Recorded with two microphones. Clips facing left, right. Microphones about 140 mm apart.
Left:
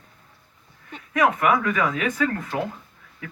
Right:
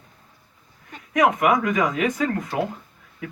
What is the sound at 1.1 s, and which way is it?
Speech, 15° right (ahead or behind).